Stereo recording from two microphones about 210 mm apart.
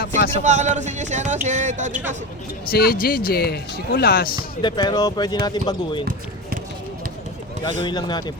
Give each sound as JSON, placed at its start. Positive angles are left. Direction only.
{"t": 0.3, "sound": "speech", "side_deg": -35}
{"t": 2.6, "sound": "speech", "side_deg": 45}
{"t": 4.4, "sound": "speech", "side_deg": 20}
{"t": 7.8, "sound": "speech", "side_deg": 20}